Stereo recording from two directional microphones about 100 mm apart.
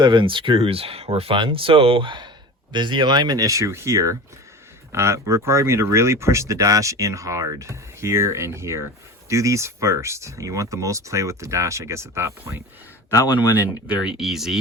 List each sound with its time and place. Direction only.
0.0 s speech: 50° right (ahead or behind); by 12.5 s 30° right (ahead or behind)
13.1 s speech: 40° left (ahead or behind)
14.0 s speech: 5° right (ahead or behind)